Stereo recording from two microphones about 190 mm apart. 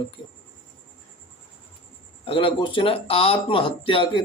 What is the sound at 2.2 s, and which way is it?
Speech, 30° left (ahead or behind).